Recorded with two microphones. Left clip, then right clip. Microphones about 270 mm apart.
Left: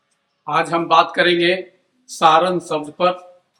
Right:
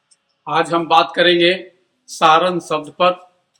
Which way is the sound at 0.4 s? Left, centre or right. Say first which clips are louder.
Right 1 dB; centre.